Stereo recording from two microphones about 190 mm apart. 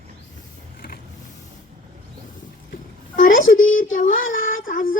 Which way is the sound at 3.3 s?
90° left.